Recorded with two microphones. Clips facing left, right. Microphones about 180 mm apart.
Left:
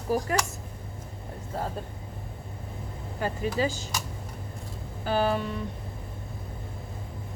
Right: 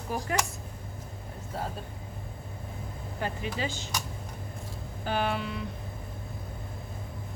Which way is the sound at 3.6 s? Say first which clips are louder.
Left 7 dB; 40° left (ahead or behind).